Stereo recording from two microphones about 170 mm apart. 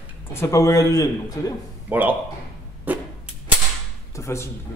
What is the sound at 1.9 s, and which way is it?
Speech, 10° right (ahead or behind).